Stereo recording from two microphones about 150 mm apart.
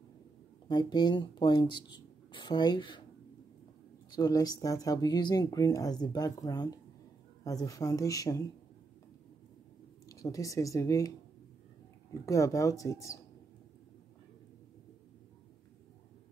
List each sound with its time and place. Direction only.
0.7 s speech: 30° left (ahead or behind)
4.1 s speech: 25° left (ahead or behind)
10.0 s speech: 20° left (ahead or behind)